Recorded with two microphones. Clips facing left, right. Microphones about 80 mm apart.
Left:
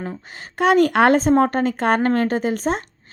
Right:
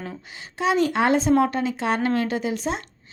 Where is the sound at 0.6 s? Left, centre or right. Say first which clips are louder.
Left 6 dB; left.